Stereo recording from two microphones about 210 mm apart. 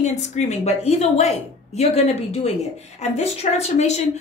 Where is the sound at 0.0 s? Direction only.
35° left (ahead or behind).